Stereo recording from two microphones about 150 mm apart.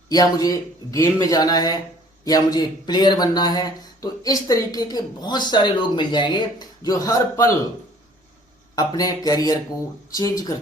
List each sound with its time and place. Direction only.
0.1 s speech: 25° left (ahead or behind)
8.7 s speech: 25° left (ahead or behind)